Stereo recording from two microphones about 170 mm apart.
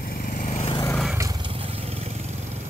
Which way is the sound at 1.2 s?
25° right (ahead or behind).